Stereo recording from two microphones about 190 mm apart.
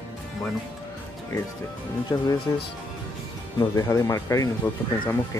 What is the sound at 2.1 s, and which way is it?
Speech, 20° left (ahead or behind).